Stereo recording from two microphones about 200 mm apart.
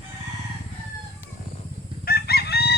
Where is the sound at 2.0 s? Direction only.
50° left (ahead or behind).